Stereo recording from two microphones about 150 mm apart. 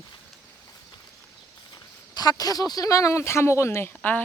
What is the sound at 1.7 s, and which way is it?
Speech, 25° left (ahead or behind).